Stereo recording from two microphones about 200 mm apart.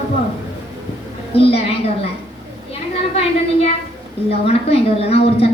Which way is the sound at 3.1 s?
30° left (ahead or behind).